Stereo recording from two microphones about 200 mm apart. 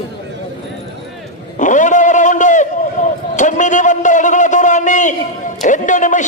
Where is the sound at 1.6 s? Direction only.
40° left (ahead or behind).